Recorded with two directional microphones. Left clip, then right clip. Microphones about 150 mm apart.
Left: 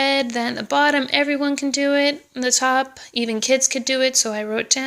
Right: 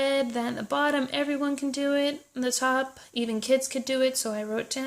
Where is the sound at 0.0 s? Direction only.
15° left (ahead or behind).